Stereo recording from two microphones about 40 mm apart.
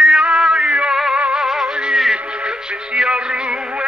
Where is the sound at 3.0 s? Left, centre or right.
Right.